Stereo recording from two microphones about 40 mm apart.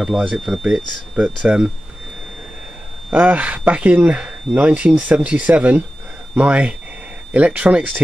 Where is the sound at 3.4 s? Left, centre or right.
Right.